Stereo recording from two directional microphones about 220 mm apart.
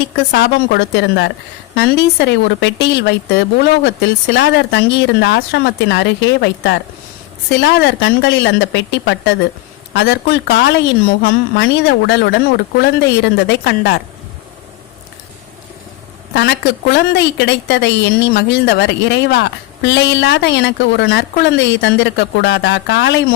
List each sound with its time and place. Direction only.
0.3 s a woman's voice: 45° left (ahead or behind)
13.5 s a woman's voice: 45° left (ahead or behind)
16.3 s a woman's voice: 50° left (ahead or behind)